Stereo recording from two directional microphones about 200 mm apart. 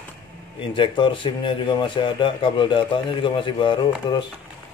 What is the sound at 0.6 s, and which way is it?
Speech, 25° left (ahead or behind).